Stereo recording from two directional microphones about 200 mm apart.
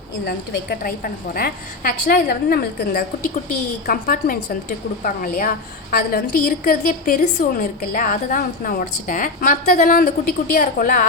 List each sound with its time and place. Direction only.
0.3 s a woman's voice: 50° left (ahead or behind)